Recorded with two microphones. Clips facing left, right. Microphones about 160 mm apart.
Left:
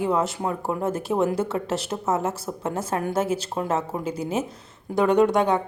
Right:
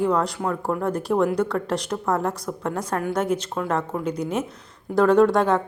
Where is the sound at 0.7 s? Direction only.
25° left (ahead or behind).